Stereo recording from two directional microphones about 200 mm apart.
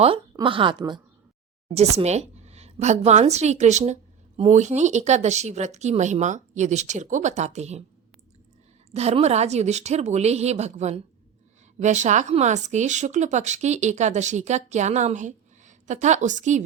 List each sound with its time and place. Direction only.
0.3 s a woman's voice: 25° right (ahead or behind)
8.9 s speech: 30° right (ahead or behind)